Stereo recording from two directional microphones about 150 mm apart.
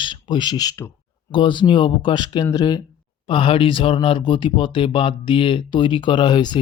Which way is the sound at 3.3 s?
35° left (ahead or behind).